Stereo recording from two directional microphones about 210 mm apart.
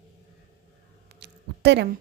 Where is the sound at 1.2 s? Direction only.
55° right (ahead or behind).